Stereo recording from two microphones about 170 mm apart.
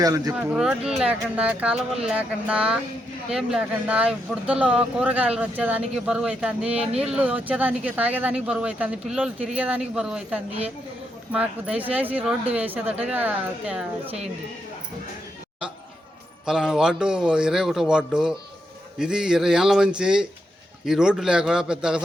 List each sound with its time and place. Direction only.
0.0 s speech: 20° right (ahead or behind)
0.3 s speech: 5° right (ahead or behind)
16.5 s speech: 5° right (ahead or behind)